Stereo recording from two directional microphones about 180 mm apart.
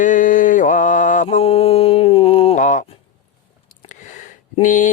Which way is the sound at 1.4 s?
35° left (ahead or behind).